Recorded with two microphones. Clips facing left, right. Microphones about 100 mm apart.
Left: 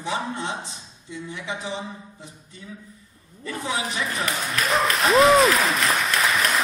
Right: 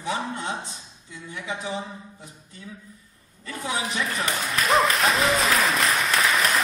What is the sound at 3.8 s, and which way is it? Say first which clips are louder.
Applause: even; centre (ahead or behind).